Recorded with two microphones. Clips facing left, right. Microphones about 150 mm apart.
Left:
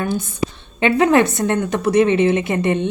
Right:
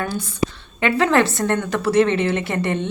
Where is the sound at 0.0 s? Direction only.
20° left (ahead or behind).